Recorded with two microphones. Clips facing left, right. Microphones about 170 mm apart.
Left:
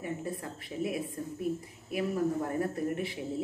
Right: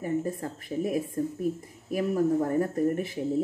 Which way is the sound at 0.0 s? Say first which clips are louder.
Right 7 dB; 45° right (ahead or behind).